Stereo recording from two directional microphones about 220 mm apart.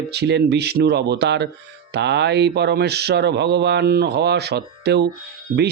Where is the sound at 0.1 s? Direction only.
50° right (ahead or behind).